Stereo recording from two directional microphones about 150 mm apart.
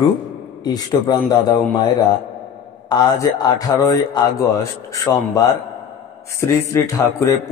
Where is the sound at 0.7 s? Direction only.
25° left (ahead or behind).